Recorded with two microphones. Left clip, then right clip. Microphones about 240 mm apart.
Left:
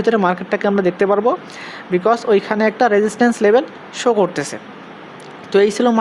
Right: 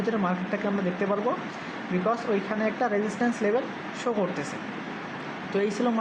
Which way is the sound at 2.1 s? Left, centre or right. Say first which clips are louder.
Left 12 dB; left.